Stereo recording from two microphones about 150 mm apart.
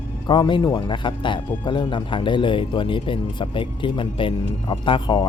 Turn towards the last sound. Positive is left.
turn(degrees=30)  # may be behind; listen again after turning